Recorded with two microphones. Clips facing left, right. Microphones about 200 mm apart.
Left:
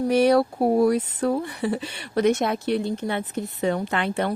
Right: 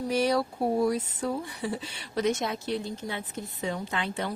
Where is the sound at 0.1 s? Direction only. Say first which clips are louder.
Left 7 dB; 60° left (ahead or behind).